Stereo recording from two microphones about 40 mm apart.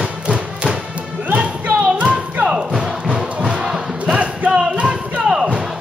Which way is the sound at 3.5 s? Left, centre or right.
Centre.